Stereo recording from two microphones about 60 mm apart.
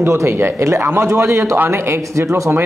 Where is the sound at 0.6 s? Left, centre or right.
Right.